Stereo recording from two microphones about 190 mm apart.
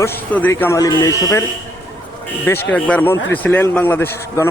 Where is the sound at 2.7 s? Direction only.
10° left (ahead or behind).